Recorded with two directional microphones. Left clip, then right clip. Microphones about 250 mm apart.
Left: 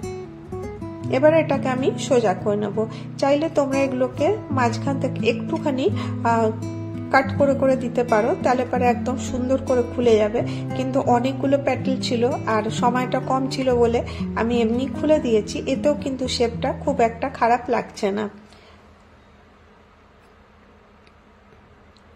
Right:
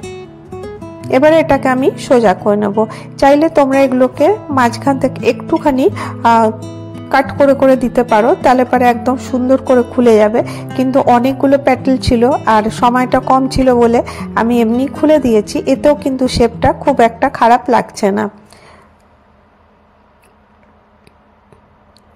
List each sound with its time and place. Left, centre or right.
0.0 s music: centre
1.0 s speech: right